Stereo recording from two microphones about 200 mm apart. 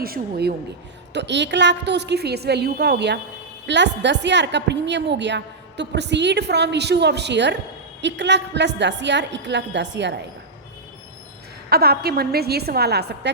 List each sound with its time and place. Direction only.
0.0 s a woman's voice: 50° right (ahead or behind)
1.1 s a woman's voice: 60° right (ahead or behind)
11.7 s a woman's voice: 50° right (ahead or behind)